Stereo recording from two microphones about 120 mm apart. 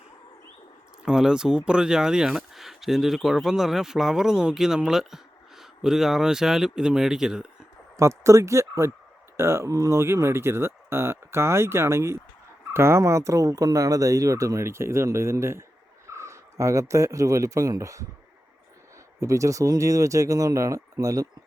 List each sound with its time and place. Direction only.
1.0 s speech: 5° right (ahead or behind)
7.9 s speech: 25° right (ahead or behind)
19.2 s speech: 25° right (ahead or behind)